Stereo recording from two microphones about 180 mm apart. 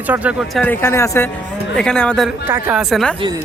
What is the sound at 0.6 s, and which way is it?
Speech, 10° left (ahead or behind).